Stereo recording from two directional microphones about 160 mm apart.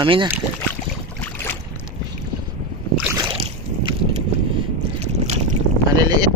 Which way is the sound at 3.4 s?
30° right (ahead or behind).